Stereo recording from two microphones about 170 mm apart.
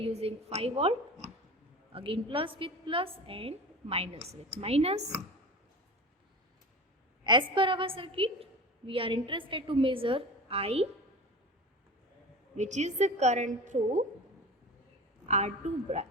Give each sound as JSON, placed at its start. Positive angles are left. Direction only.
{"t": 0.0, "sound": "a woman's voice", "side_deg": -35}
{"t": 7.3, "sound": "a woman's voice", "side_deg": -30}
{"t": 12.5, "sound": "a woman's voice", "side_deg": -45}
{"t": 15.3, "sound": "a woman's voice", "side_deg": -40}